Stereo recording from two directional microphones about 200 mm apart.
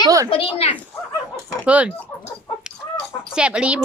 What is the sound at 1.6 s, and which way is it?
Speech, 5° right (ahead or behind).